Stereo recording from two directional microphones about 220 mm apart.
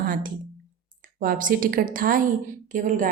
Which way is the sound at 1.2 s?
40° right (ahead or behind).